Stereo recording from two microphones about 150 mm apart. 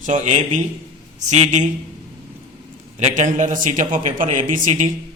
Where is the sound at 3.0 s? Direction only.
55° right (ahead or behind).